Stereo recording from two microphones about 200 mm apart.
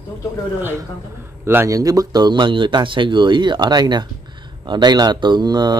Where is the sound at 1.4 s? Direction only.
10° right (ahead or behind).